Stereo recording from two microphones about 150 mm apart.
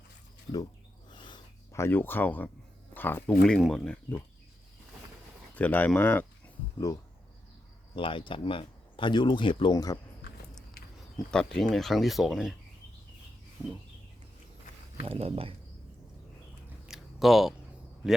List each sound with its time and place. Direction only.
1.1 s a sound: 30° left (ahead or behind)
1.7 s speech: 15° left (ahead or behind)
3.4 s speech: 5° left (ahead or behind)
5.5 s speech: 10° left (ahead or behind)
7.9 s speech: 35° left (ahead or behind)
9.7 s speech: 25° left (ahead or behind)
11.3 s speech: 5° left (ahead or behind)
15.0 s speech: 40° right (ahead or behind)
16.8 s a sound: centre (ahead or behind)
18.0 s speech: 5° right (ahead or behind)